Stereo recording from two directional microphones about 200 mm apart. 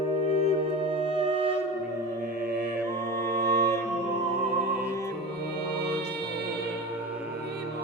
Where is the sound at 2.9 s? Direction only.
15° left (ahead or behind).